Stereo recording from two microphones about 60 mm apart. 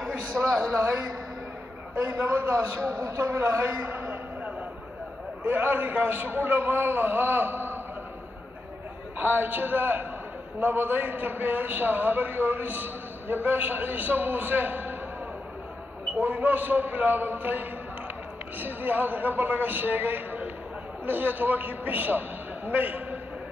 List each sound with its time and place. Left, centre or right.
0.5 s speech: centre
2.5 s a man's voice: right
3.3 s a man's voice: right
5.4 s a man's voice: right
9.2 s a man's voice: right
16.2 s a man's voice: right